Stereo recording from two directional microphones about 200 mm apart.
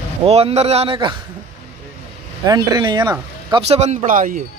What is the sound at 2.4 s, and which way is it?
Speech, 20° right (ahead or behind).